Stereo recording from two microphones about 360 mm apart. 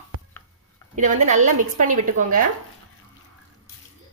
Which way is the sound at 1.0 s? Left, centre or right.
Right.